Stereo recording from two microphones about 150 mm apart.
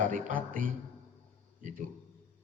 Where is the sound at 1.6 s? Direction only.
60° right (ahead or behind).